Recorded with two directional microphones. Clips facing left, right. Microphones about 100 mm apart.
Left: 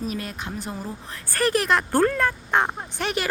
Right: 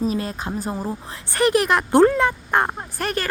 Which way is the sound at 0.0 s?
30° right (ahead or behind).